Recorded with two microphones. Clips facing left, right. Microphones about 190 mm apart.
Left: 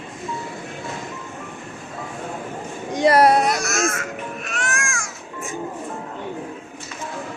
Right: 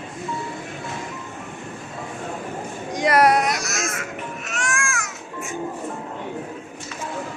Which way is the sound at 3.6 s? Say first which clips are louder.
Left 5 dB; 50° left (ahead or behind).